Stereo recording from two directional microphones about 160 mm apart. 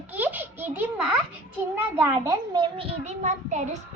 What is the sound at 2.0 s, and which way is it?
A child's voice, 25° right (ahead or behind).